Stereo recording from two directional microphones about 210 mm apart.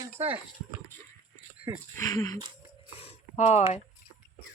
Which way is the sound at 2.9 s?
30° left (ahead or behind).